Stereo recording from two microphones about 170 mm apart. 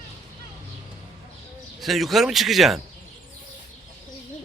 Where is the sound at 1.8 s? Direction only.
Centre (ahead or behind).